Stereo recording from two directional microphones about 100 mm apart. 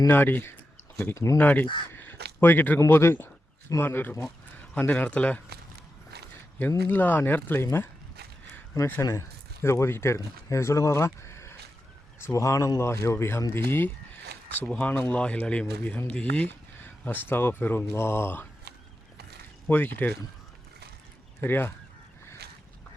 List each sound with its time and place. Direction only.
0.1 s speech: 20° left (ahead or behind)
1.4 s speech: 20° left (ahead or behind)
8.9 s speech: 30° left (ahead or behind)
19.6 s speech: 20° left (ahead or behind)
21.4 s speech: 20° left (ahead or behind)